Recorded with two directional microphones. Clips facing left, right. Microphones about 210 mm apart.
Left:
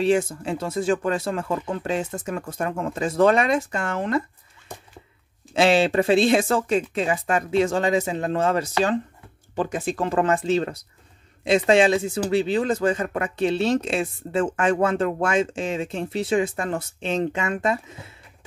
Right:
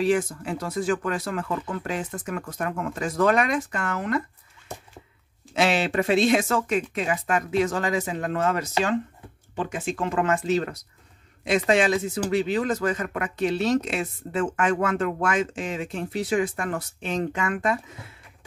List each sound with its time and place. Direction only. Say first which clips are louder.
0.0 s speech: left 2 dB; 25° left (ahead or behind)
5.5 s speech: left 5 dB; 30° left (ahead or behind)